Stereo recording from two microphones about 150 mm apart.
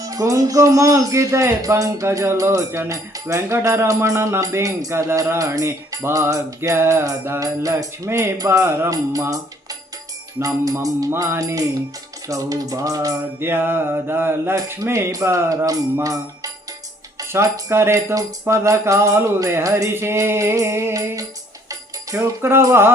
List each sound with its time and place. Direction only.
0.0 s speech: 25° right (ahead or behind)
10.4 s speech: 25° right (ahead or behind)
21.7 s music: 20° right (ahead or behind)